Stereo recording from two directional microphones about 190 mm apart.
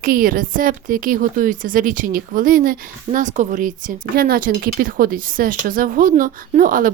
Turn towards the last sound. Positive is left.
turn(degrees=-45)  # may be behind; listen again after turning